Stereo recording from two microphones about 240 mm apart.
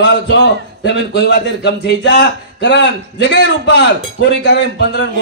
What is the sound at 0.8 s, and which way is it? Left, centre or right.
A man's voice, left.